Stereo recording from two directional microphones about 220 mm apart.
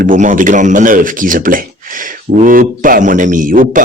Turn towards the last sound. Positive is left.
turn(degrees=-40)  # may be behind; listen again after turning